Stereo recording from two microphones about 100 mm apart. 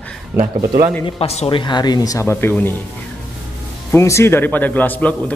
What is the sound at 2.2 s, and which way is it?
Speech, 25° left (ahead or behind).